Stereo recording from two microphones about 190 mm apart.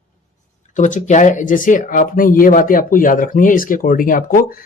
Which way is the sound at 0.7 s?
40° left (ahead or behind).